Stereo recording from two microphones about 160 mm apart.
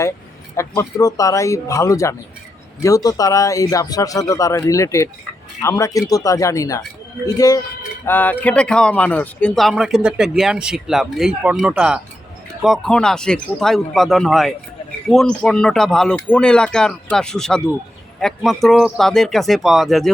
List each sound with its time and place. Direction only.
0.5 s speech: 15° left (ahead or behind)
8.0 s a man's voice: 10° left (ahead or behind)